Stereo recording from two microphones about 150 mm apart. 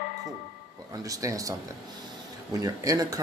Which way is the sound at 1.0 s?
20° right (ahead or behind).